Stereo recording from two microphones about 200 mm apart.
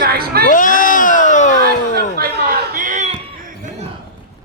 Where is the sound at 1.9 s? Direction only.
50° right (ahead or behind).